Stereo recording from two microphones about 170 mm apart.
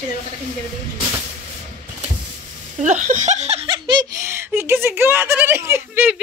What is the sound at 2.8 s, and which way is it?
Giggle, 45° right (ahead or behind).